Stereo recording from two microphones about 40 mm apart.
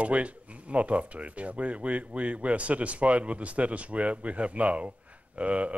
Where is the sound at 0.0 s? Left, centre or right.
Right.